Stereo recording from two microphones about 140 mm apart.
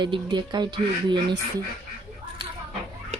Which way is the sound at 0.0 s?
35° right (ahead or behind).